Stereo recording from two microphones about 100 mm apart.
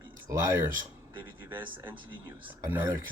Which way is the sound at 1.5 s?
20° right (ahead or behind).